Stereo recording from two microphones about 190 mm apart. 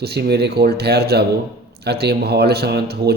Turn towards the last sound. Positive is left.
turn(degrees=-60)  # may be behind; listen again after turning